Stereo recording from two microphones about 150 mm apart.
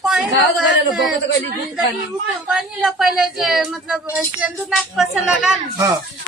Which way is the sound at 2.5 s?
Centre (ahead or behind).